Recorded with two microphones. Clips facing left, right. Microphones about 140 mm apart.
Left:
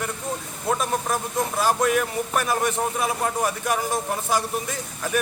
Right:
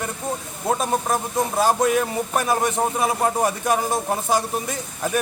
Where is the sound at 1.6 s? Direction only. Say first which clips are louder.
Right 2 dB; 25° right (ahead or behind).